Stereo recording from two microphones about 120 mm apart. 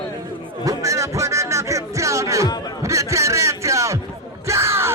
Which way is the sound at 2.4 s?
35° left (ahead or behind).